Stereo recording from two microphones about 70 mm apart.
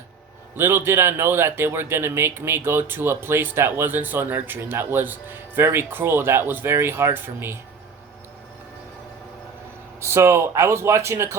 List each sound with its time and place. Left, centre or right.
0.5 s speech: right
10.0 s speech: right